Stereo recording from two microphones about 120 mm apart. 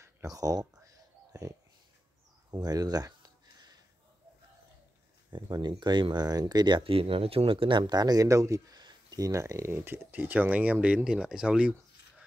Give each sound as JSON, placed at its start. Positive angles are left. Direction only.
{"t": 0.0, "sound": "speech", "side_deg": -25}
{"t": 2.5, "sound": "a sound", "side_deg": -30}
{"t": 5.3, "sound": "speech", "side_deg": -35}